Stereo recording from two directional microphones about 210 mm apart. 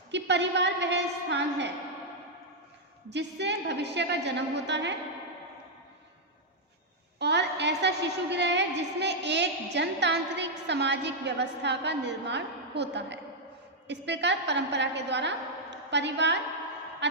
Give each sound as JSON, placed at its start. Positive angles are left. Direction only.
{"t": 0.1, "sound": "a woman's voice", "side_deg": -55}
{"t": 3.1, "sound": "a woman's voice", "side_deg": -55}
{"t": 7.2, "sound": "a woman's voice", "side_deg": -55}
{"t": 17.0, "sound": "music", "side_deg": -55}